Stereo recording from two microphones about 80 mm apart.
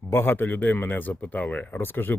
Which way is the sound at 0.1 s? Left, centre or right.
Left.